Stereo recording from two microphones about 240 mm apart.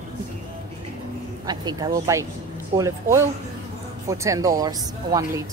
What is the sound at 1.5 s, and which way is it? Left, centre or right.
Speech, centre.